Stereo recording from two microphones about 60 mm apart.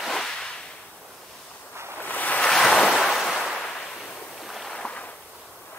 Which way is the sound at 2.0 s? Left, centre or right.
Left.